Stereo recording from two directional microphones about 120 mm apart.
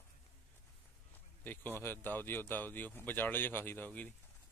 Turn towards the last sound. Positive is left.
turn(degrees=10)  # may be behind; listen again after turning